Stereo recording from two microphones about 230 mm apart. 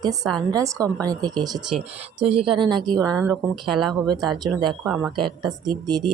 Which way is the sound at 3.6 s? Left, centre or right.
Centre.